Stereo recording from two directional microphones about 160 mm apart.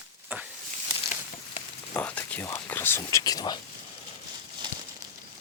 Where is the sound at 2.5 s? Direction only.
15° left (ahead or behind).